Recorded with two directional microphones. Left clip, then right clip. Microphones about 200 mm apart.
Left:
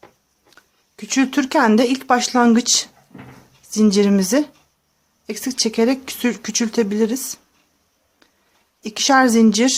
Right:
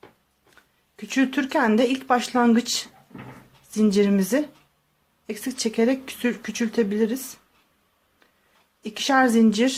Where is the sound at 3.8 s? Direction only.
20° left (ahead or behind).